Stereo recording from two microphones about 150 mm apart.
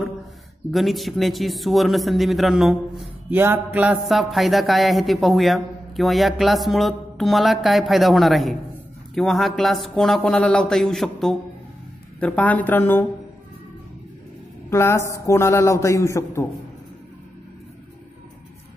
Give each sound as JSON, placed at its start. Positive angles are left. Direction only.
{"t": 0.7, "sound": "a woman's voice", "side_deg": 0}
{"t": 3.3, "sound": "music", "side_deg": -15}
{"t": 4.1, "sound": "a woman's voice", "side_deg": 0}
{"t": 14.7, "sound": "a man's voice", "side_deg": 15}